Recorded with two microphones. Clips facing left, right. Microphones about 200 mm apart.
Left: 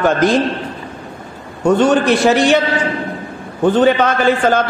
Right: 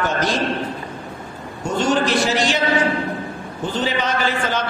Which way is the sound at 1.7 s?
60° left (ahead or behind).